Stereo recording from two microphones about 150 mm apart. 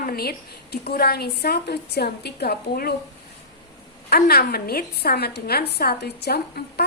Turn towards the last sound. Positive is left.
turn(degrees=90)